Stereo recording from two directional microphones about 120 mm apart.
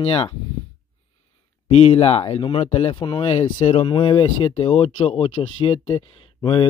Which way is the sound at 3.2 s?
65° left (ahead or behind).